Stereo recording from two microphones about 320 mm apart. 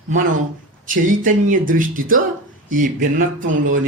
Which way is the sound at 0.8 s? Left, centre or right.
Right.